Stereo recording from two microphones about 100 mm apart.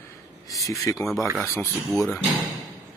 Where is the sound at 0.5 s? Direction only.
35° left (ahead or behind).